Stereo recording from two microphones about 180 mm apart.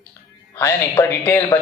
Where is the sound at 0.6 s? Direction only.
15° left (ahead or behind).